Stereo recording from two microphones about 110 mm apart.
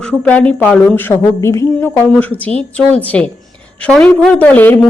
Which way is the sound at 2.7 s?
10° left (ahead or behind).